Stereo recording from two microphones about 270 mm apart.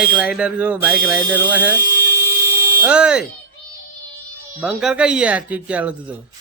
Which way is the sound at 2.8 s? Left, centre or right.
Centre.